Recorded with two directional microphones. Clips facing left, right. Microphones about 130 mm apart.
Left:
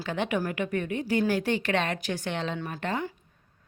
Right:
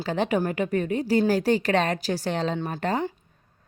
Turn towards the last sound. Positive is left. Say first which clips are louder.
# right 5 dB
turn(degrees=-35)  # may be behind; listen again after turning